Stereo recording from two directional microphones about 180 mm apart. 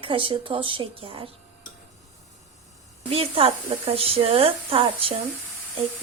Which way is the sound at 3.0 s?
30° right (ahead or behind).